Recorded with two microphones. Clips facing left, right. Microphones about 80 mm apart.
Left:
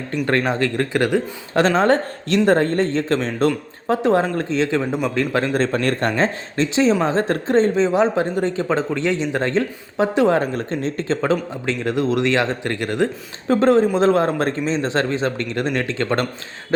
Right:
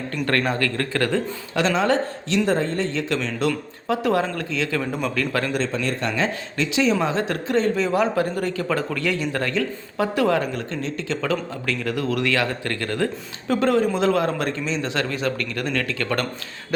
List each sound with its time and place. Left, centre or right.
0.3 s a man's voice: left
1.5 s a man's voice: left
5.5 s a man's voice: left